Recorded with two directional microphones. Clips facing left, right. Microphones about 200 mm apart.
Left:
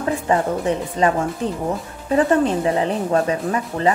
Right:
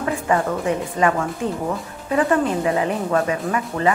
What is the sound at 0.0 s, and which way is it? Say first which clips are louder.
Speech: left 1 dB; 25° left (ahead or behind).